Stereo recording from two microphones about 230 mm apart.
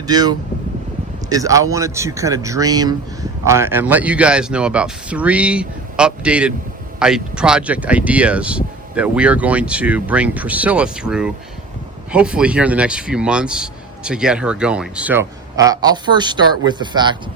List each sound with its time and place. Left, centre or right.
0.1 s a man's voice: centre